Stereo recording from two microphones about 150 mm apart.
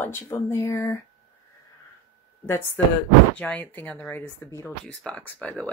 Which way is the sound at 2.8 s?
10° left (ahead or behind).